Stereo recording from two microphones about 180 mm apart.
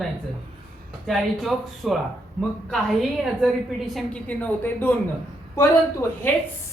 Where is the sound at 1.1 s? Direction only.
Centre (ahead or behind).